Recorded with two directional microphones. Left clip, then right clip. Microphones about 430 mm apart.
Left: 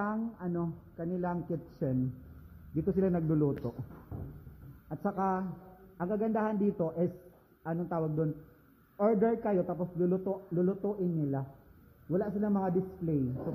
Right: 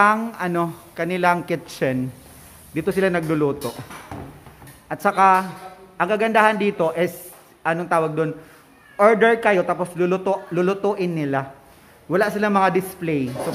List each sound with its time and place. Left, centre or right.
0.0 s a man's voice: centre
4.8 s a man's voice: centre